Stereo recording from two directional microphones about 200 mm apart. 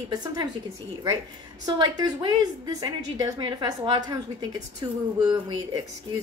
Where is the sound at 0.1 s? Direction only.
20° right (ahead or behind).